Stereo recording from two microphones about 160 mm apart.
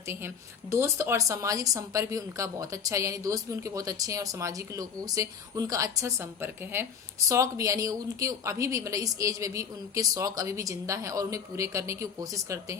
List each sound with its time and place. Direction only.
0.7 s speech: 15° right (ahead or behind)